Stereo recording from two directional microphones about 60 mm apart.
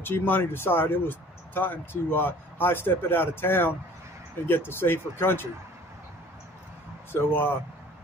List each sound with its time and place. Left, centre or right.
0.0 s speech: left
7.1 s speech: left